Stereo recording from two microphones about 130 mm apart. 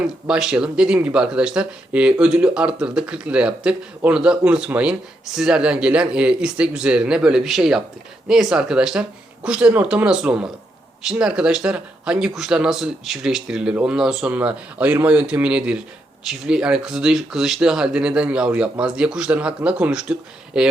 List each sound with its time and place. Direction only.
0.0 s speech: 5° right (ahead or behind)